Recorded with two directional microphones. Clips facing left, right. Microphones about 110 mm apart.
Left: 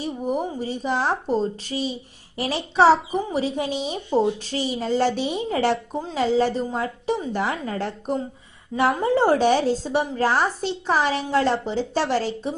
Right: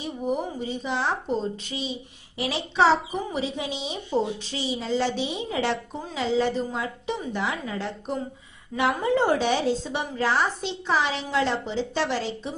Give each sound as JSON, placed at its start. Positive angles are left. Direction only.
{"t": 0.0, "sound": "a woman's voice", "side_deg": 40}